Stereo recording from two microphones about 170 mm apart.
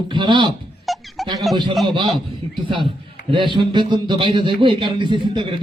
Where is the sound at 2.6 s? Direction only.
30° right (ahead or behind).